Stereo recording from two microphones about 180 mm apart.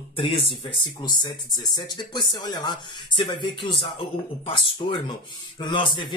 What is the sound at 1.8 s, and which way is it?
Speech, 25° left (ahead or behind).